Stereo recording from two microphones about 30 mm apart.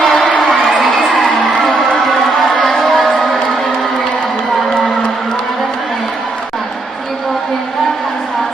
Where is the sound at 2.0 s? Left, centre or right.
Centre.